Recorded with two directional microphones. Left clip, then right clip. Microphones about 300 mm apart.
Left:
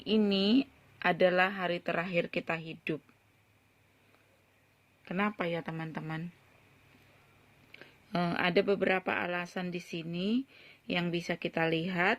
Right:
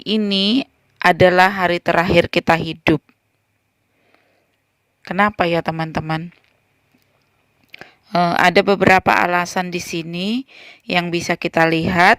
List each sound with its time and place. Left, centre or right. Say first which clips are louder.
0.0 s speech: right 11 dB; right
5.0 s speech: right 17 dB; right
7.7 s speech: right 16 dB; right